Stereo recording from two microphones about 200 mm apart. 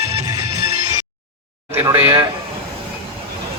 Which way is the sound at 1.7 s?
10° right (ahead or behind).